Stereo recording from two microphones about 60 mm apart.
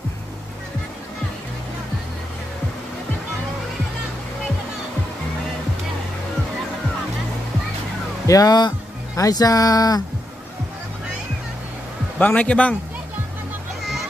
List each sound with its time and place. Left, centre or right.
8.3 s speech: left
12.2 s a man's voice: left